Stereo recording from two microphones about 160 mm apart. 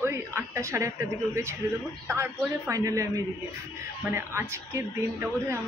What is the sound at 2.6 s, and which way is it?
A woman's voice, 20° right (ahead or behind).